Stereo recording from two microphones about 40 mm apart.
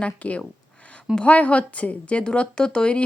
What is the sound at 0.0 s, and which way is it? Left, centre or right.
Speech, left.